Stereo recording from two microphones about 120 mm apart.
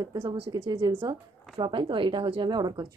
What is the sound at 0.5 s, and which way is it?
Speech, 40° right (ahead or behind).